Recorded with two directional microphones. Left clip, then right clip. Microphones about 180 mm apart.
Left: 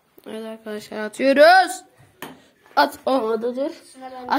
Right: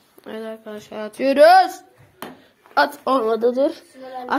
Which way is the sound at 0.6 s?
35° left (ahead or behind).